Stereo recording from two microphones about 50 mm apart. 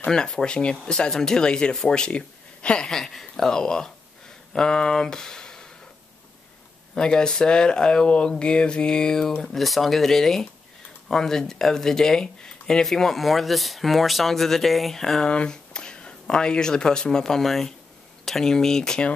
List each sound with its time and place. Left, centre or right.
0.0 s speech: centre
2.9 s speech: centre
7.0 s speech: centre